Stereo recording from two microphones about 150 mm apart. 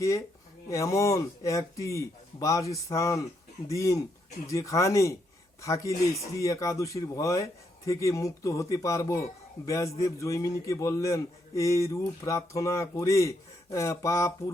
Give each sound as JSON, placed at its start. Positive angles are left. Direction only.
{"t": 0.7, "sound": "speech", "side_deg": 20}